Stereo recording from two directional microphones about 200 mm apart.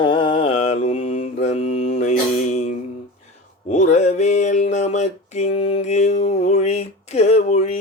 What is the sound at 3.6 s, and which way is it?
Mantra, 35° left (ahead or behind).